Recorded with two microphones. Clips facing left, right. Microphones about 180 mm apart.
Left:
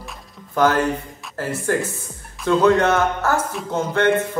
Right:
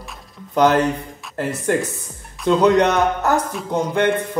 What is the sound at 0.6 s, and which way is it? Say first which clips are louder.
Speech: right 2 dB; 20° right (ahead or behind).